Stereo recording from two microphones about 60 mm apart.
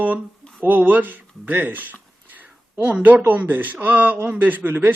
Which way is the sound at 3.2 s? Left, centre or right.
Right.